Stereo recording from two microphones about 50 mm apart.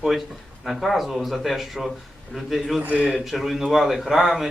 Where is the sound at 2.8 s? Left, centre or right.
Right.